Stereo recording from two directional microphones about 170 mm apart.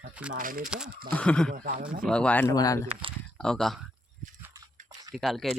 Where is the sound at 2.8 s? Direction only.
30° right (ahead or behind).